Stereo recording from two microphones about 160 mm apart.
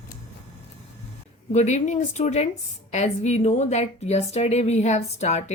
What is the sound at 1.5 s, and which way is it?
Speech, 45° left (ahead or behind).